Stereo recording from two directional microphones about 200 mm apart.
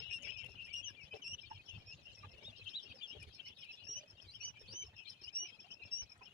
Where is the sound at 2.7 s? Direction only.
5° right (ahead or behind).